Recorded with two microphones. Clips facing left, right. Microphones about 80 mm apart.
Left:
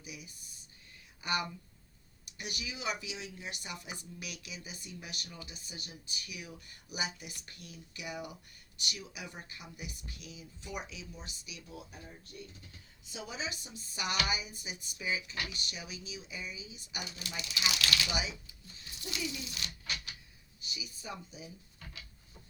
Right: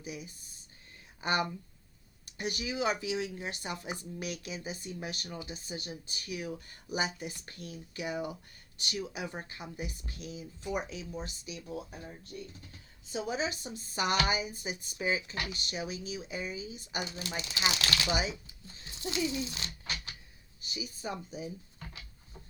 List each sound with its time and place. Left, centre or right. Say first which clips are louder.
0.0 s speech: right 7 dB; right
18.4 s a sound: right 3 dB; right
20.6 s speech: right 6 dB; right